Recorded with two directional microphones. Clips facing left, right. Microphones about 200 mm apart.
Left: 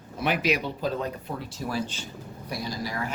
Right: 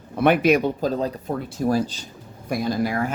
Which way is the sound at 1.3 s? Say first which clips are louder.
Right 9 dB; 50° right (ahead or behind).